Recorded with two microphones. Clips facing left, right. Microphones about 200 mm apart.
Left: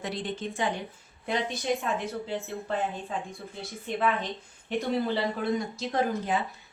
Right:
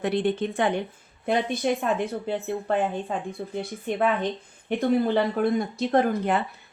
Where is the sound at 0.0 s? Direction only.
60° right (ahead or behind).